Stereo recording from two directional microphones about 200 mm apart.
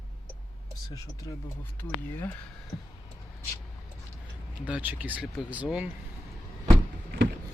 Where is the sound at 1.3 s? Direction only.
15° left (ahead or behind).